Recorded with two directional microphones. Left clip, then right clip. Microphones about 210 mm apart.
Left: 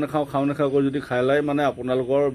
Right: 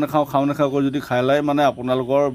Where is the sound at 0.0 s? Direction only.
40° right (ahead or behind).